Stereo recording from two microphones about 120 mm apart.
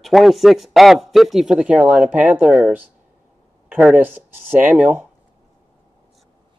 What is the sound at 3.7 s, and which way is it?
Speech, 15° right (ahead or behind).